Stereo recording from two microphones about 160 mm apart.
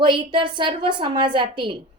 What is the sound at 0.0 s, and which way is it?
A woman's voice, 30° right (ahead or behind).